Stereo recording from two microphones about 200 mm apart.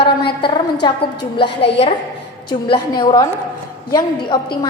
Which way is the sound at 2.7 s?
20° left (ahead or behind).